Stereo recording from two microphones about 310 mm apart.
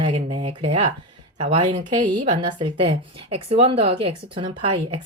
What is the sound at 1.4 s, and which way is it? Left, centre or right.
Speech, centre.